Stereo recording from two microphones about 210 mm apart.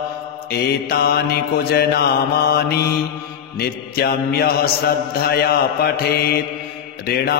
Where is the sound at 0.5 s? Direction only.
50° left (ahead or behind).